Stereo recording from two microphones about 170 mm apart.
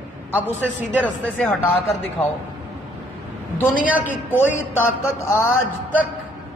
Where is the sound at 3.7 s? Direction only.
50° left (ahead or behind).